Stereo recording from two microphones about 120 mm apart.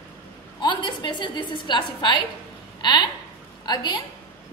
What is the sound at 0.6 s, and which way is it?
A woman's voice, 40° left (ahead or behind).